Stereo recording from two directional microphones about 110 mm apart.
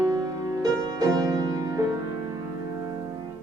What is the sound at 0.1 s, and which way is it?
Music, 35° right (ahead or behind).